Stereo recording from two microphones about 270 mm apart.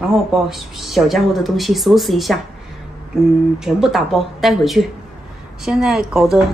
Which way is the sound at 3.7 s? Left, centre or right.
Centre.